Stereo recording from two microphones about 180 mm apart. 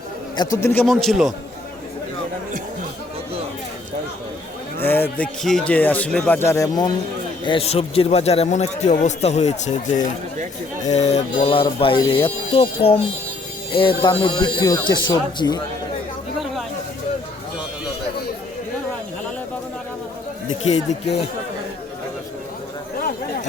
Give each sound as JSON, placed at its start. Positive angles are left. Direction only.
{"t": 0.3, "sound": "speech", "side_deg": 15}
{"t": 4.8, "sound": "speech", "side_deg": 10}
{"t": 7.4, "sound": "a man's voice", "side_deg": 30}
{"t": 23.0, "sound": "a sound", "side_deg": 50}